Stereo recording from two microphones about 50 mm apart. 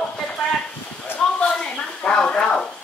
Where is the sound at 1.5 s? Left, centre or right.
Centre.